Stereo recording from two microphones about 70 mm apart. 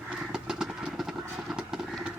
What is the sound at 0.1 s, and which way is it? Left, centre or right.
Vehicle, centre.